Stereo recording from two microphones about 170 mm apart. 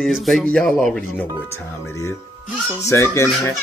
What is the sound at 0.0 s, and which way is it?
Speech, centre (ahead or behind).